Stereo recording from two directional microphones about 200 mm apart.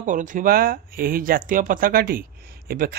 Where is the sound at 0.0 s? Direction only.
40° right (ahead or behind).